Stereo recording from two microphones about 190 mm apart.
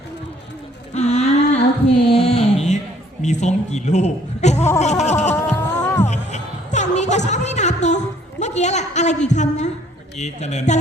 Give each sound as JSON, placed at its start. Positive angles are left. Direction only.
{"t": 0.9, "sound": "a sound", "side_deg": 35}
{"t": 3.2, "sound": "a man's voice", "side_deg": 35}
{"t": 5.3, "sound": "music", "side_deg": 15}
{"t": 6.1, "sound": "music", "side_deg": 40}
{"t": 10.2, "sound": "a man's voice", "side_deg": 35}